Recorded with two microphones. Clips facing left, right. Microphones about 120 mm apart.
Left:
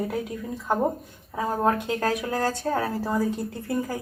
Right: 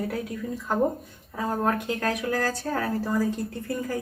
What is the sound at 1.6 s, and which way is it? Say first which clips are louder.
A woman's voice: left 4 dB; 30° left (ahead or behind).